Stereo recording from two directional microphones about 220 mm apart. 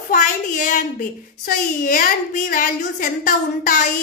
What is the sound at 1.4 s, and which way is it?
A woman's voice, 40° left (ahead or behind).